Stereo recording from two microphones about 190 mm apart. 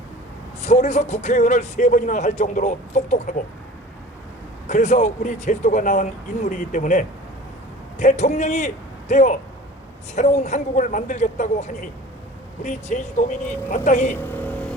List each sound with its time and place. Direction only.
0.6 s speech: 35° left (ahead or behind)
4.6 s a man's voice: 40° left (ahead or behind)
14.2 s vehicle: 10° left (ahead or behind)